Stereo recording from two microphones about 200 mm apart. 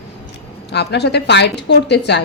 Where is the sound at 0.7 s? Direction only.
55° left (ahead or behind).